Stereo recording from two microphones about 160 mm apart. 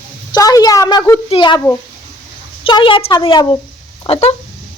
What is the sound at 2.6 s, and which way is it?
A woman's voice, 30° left (ahead or behind).